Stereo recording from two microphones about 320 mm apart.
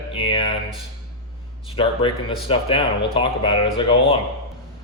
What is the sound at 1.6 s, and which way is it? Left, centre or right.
A man's voice, centre.